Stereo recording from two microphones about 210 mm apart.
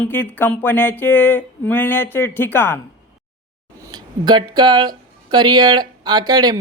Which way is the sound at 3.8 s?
20° right (ahead or behind).